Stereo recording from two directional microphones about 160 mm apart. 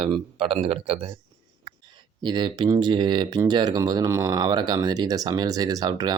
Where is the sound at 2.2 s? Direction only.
30° right (ahead or behind).